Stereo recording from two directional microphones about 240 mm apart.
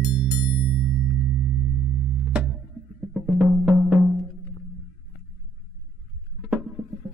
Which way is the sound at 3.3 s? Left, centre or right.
Centre.